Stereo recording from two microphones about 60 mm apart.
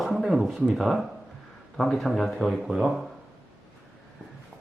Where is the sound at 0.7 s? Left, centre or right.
Centre.